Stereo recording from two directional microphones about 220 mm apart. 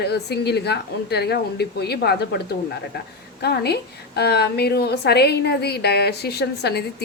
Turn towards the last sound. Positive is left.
turn(degrees=45)  # may be behind; listen again after turning